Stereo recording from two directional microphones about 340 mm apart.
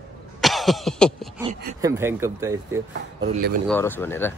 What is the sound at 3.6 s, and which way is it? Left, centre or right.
Speech, centre.